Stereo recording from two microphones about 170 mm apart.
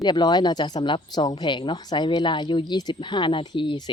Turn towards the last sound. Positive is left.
turn(degrees=25)  # may be behind; listen again after turning